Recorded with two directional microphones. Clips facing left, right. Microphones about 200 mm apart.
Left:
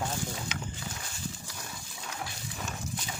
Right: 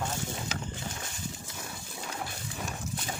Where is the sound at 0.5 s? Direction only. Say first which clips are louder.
Right 2 dB; 40° right (ahead or behind).